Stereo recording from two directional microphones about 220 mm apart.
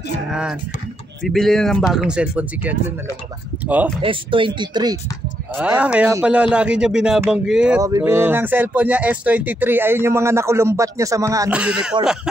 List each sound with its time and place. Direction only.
0.3 s speech: 5° right (ahead or behind)
4.0 s speech: 25° right (ahead or behind)
5.5 s speech: 5° right (ahead or behind)